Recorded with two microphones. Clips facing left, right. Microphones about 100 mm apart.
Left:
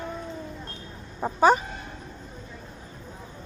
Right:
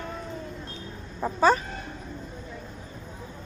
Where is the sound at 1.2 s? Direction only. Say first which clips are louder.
Left 2 dB; 15° left (ahead or behind).